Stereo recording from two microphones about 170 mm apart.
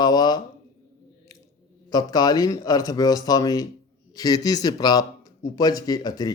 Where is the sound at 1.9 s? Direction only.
25° left (ahead or behind).